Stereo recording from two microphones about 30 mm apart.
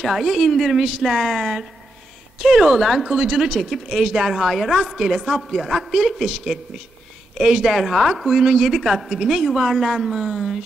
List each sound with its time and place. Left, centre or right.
0.0 s speech: centre
2.3 s speech: centre
3.1 s speech: centre
3.5 s speech: centre
3.9 s speech: centre
4.4 s speech: centre
5.3 s speech: centre
5.7 s speech: centre
7.3 s speech: centre
7.6 s speech: centre
8.6 s speech: centre